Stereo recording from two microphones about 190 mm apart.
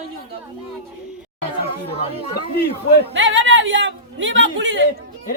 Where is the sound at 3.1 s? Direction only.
75° right (ahead or behind).